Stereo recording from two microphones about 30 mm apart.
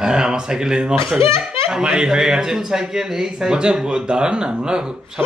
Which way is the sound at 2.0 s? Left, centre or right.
Right.